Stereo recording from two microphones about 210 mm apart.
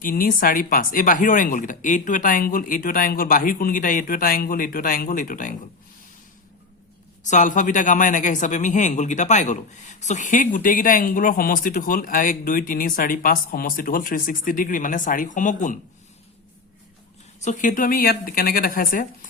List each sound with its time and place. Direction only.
0.0 s a man's voice: 40° left (ahead or behind)
7.3 s a man's voice: 35° left (ahead or behind)
17.4 s a man's voice: 35° left (ahead or behind)